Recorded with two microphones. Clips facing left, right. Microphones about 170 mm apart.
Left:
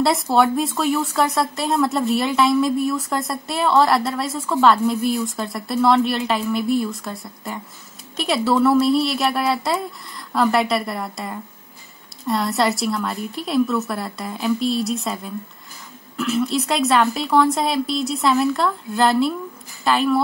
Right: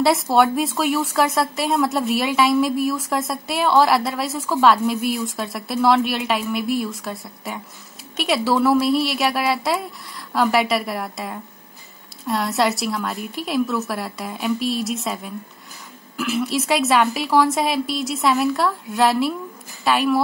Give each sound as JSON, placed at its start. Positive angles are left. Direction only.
{"t": 0.0, "sound": "a woman's voice", "side_deg": 0}